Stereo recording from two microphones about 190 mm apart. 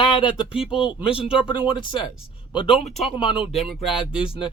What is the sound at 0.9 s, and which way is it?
Speech, 30° left (ahead or behind).